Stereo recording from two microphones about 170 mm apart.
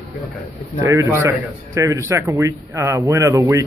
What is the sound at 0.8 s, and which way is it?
Speech, 15° right (ahead or behind).